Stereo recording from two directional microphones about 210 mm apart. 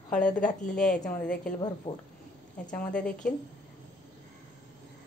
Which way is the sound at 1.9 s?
25° left (ahead or behind).